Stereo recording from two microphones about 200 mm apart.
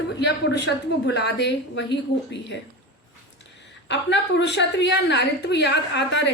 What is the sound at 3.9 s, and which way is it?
A woman's voice, 60° left (ahead or behind).